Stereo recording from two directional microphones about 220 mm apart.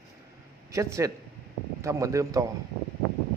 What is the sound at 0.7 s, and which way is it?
Speech, 15° right (ahead or behind).